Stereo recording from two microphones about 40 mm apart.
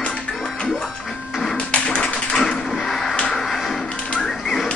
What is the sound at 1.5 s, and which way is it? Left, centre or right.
Tap, left.